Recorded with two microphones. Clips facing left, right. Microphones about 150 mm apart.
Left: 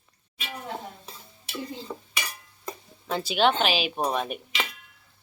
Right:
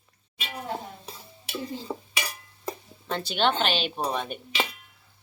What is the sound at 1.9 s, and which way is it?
Stir, 25° right (ahead or behind).